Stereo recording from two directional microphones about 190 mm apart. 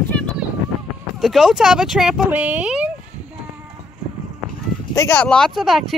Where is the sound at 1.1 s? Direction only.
Centre (ahead or behind).